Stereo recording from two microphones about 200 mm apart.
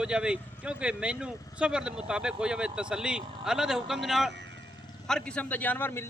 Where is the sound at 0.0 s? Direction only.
5° right (ahead or behind).